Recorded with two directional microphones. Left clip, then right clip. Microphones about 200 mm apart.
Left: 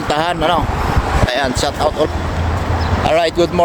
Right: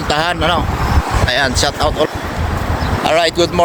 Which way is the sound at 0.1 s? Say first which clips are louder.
Even; 15° left (ahead or behind).